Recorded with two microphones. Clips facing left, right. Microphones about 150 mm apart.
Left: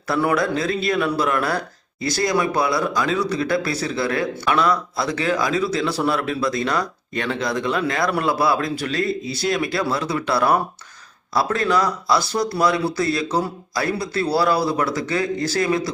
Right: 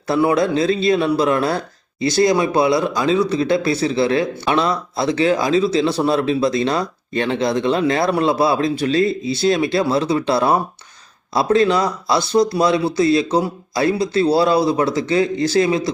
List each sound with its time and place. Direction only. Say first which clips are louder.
0.1 s a man's voice: right 4 dB; 25° right (ahead or behind)